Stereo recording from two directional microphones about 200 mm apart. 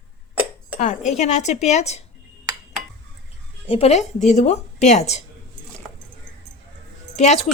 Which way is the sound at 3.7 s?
30° left (ahead or behind).